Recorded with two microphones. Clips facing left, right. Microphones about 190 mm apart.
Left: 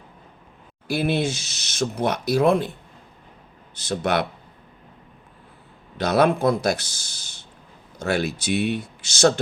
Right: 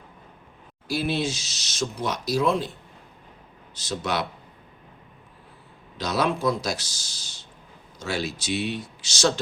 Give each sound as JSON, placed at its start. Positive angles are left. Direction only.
{"t": 0.9, "sound": "speech", "side_deg": 55}
{"t": 3.8, "sound": "speech", "side_deg": 55}
{"t": 6.0, "sound": "speech", "side_deg": 60}